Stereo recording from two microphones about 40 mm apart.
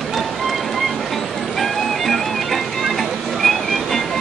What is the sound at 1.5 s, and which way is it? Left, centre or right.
Music, centre.